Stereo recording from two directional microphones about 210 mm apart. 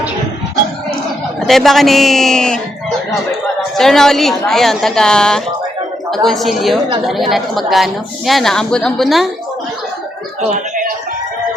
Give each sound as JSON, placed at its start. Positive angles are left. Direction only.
{"t": 1.4, "sound": "a woman's voice", "side_deg": 0}
{"t": 3.6, "sound": "a woman's voice", "side_deg": 0}
{"t": 10.5, "sound": "a sound", "side_deg": -40}